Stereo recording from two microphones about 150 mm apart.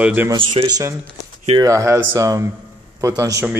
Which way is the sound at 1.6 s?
20° right (ahead or behind).